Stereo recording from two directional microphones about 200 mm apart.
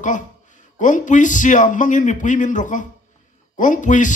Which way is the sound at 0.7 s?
40° left (ahead or behind).